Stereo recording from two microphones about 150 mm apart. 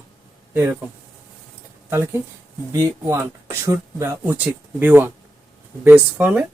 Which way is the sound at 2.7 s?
20° right (ahead or behind).